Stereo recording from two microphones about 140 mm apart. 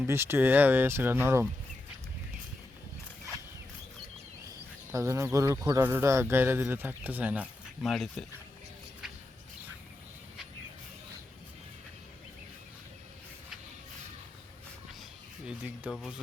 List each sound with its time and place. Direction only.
0.1 s speech: 20° right (ahead or behind)
4.9 s speech: 20° right (ahead or behind)
7.8 s speech: centre (ahead or behind)
15.4 s speech: 10° right (ahead or behind)